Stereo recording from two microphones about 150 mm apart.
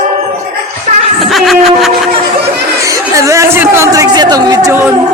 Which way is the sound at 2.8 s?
20° right (ahead or behind).